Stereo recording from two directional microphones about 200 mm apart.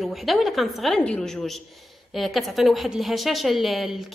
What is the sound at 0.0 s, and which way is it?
A woman's voice, centre (ahead or behind).